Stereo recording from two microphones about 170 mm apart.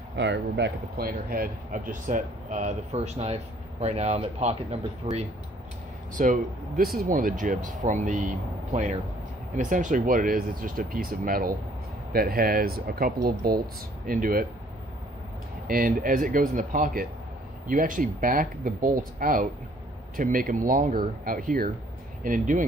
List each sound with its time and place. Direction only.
0.2 s speech: 90° right; by 5.2 s 40° right (ahead or behind)
6.1 s speech: 55° right (ahead or behind)
15.6 s speech: 60° right (ahead or behind)